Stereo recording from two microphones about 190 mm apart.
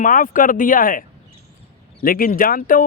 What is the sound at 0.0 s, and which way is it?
Speech, 45° left (ahead or behind).